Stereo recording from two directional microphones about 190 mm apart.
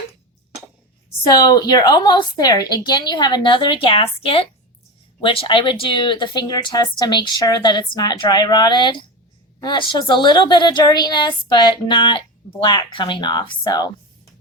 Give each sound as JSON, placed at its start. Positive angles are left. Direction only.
{"t": 1.3, "sound": "a woman's voice", "side_deg": 20}